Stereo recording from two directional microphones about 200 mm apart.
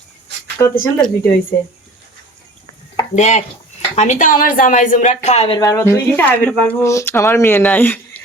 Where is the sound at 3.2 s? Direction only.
35° left (ahead or behind).